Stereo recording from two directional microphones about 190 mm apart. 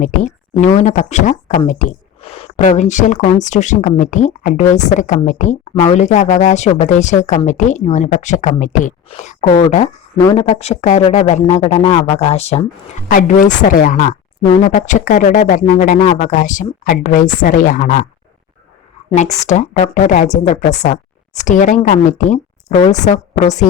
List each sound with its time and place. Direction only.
0.0 s speech: 40° left (ahead or behind)
19.5 s speech: 35° left (ahead or behind)